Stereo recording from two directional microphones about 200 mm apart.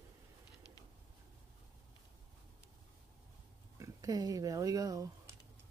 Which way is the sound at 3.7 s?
15° right (ahead or behind).